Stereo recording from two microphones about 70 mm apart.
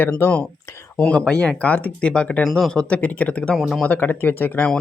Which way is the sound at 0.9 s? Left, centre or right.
Centre.